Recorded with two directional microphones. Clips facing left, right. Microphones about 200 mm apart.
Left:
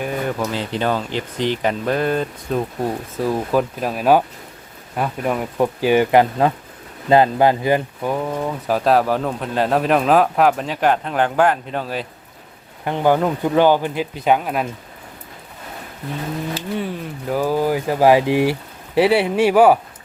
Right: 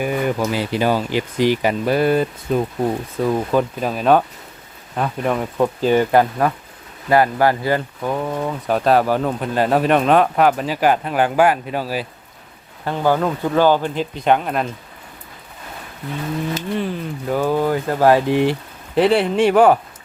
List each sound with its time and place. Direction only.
0.0 s speech: 5° right (ahead or behind); by 8.1 s 15° left (ahead or behind)
8.1 s speech: centre (ahead or behind)
12.8 s speech: 15° left (ahead or behind)
16.7 s speech: centre (ahead or behind)